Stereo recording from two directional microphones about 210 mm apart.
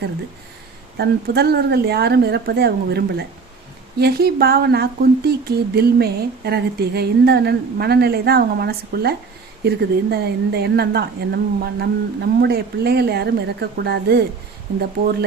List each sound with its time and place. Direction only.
0.9 s speech: 50° right (ahead or behind)